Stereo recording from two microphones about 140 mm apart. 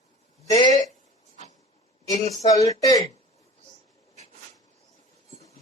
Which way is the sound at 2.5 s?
25° left (ahead or behind).